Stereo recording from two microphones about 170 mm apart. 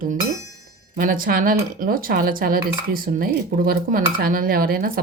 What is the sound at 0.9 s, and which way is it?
Speech, 55° right (ahead or behind).